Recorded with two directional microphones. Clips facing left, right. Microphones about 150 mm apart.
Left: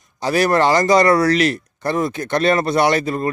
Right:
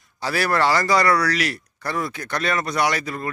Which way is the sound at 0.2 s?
20° left (ahead or behind).